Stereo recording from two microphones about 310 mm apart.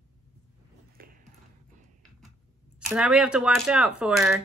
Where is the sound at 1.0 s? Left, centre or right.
Right.